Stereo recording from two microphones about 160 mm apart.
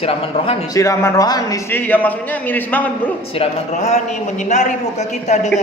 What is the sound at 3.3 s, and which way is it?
A man's voice, 40° left (ahead or behind).